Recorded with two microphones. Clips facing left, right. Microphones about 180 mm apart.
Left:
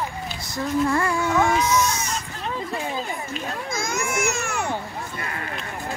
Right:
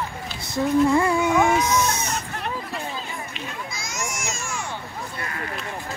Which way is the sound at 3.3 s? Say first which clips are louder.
Left 5 dB; 50° left (ahead or behind).